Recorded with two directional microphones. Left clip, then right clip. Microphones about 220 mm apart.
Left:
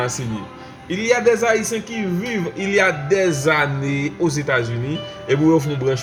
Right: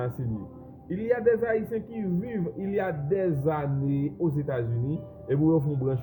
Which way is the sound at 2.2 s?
15° left (ahead or behind).